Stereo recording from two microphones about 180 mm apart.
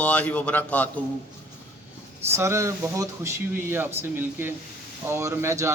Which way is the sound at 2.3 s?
15° right (ahead or behind).